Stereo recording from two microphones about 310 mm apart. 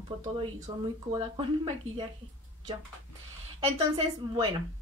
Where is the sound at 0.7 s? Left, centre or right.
Centre.